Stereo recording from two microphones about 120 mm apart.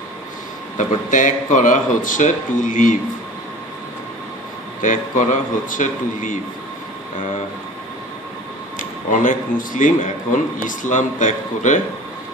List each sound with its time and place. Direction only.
0.7 s speech: 90° left
4.8 s speech: 90° left
9.1 s speech: 90° left